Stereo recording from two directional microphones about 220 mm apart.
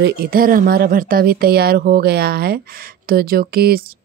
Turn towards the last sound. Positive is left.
turn(degrees=-45)  # may be behind; listen again after turning